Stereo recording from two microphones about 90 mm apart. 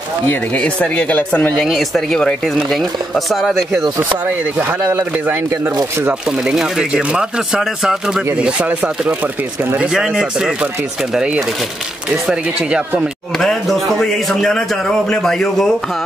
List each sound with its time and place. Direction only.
0.3 s speech: 15° left (ahead or behind)
1.6 s speech: 5° left (ahead or behind)
4.9 s speech: 20° right (ahead or behind)
6.2 s speech: 5° right (ahead or behind)
13.4 s speech: centre (ahead or behind)